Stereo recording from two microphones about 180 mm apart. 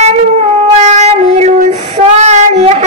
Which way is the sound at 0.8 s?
40° right (ahead or behind).